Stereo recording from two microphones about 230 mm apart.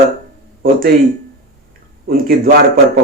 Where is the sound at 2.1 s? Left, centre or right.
Right.